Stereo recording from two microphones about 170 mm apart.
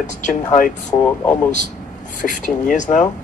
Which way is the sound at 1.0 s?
10° left (ahead or behind).